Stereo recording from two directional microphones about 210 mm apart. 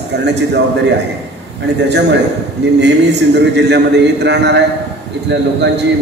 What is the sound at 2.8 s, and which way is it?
A man's voice, 55° right (ahead or behind).